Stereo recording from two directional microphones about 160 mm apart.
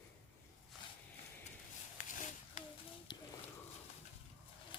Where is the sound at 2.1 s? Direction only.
50° left (ahead or behind).